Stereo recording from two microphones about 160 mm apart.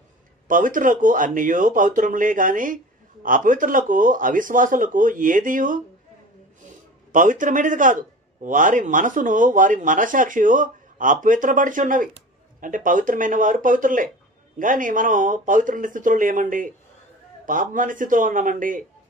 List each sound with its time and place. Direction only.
0.5 s speech: 55° right (ahead or behind)
7.1 s speech: 55° right (ahead or behind)